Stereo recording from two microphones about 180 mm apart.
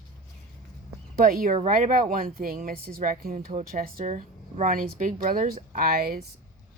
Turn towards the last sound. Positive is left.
turn(degrees=-55)  # may be behind; listen again after turning